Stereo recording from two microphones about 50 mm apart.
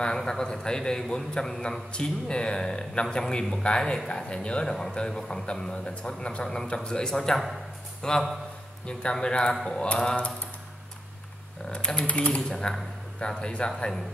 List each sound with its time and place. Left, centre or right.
0.0 s a man's voice: centre
11.7 s a man's voice: centre